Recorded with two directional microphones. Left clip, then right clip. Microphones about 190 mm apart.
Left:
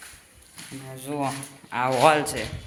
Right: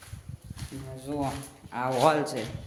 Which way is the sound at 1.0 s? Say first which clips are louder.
Left 4 dB; 5° left (ahead or behind).